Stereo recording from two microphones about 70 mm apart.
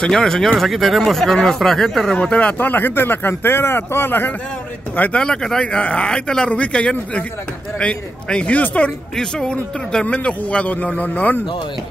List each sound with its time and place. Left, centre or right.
0.0 s speech: centre
2.1 s a man's voice: centre
2.7 s a man's voice: left
5.2 s a man's voice: centre